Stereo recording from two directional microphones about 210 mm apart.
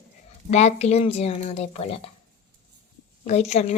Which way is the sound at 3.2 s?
30° left (ahead or behind).